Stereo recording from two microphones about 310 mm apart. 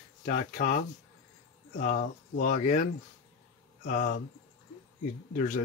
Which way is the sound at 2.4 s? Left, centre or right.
Left.